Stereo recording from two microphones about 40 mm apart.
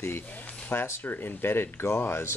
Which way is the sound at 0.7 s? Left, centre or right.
Left.